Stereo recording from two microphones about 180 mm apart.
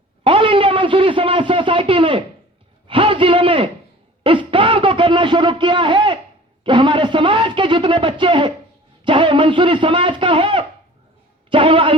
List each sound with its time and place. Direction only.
0.3 s a man's voice: 30° right (ahead or behind)